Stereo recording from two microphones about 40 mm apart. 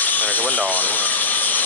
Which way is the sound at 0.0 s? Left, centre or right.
Left.